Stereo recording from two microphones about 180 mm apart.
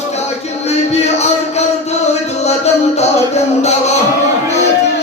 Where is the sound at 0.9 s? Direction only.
35° left (ahead or behind).